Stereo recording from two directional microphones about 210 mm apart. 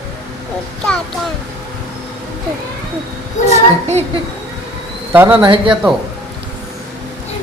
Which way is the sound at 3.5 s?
30° right (ahead or behind).